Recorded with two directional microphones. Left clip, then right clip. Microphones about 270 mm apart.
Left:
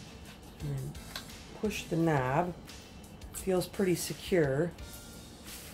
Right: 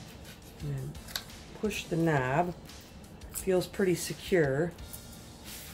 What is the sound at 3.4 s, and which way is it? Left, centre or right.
Speech, centre.